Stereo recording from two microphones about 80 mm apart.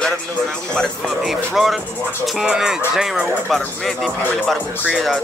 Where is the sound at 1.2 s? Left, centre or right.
Centre.